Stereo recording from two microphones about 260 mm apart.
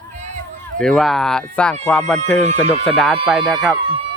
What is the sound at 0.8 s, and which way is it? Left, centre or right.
Speech, centre.